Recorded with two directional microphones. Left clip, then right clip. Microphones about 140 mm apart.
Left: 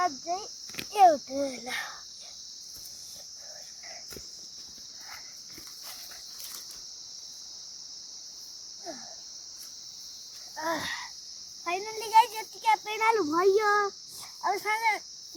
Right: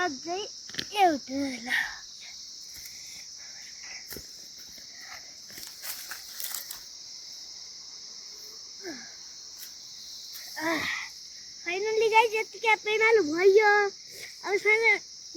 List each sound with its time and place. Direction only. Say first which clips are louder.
0.0 s speech: left 1 dB; 25° left (ahead or behind)
10.6 s a sound: right 2 dB; 15° left (ahead or behind)
11.6 s a child's voice: right 7 dB; 20° left (ahead or behind)
14.4 s speech: right 4 dB; 20° left (ahead or behind)